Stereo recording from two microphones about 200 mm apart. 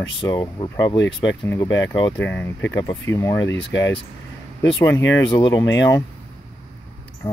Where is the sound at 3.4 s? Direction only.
65° left (ahead or behind).